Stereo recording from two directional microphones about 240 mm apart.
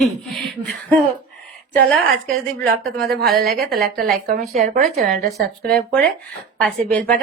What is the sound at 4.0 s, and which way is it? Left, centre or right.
Speech, right.